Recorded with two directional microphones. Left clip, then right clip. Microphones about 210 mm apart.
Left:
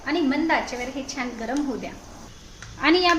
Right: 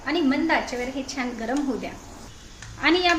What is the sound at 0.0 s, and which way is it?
A woman's voice, centre (ahead or behind).